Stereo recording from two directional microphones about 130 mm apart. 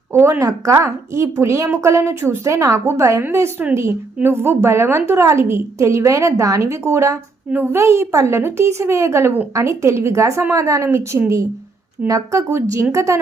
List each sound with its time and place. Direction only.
0.1 s a woman's voice: 20° right (ahead or behind)